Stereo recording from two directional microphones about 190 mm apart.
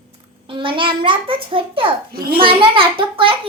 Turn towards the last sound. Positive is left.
turn(degrees=-25)  # may be behind; listen again after turning